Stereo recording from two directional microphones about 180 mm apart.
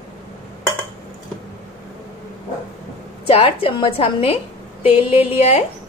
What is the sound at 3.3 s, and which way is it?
A woman's voice, 30° left (ahead or behind).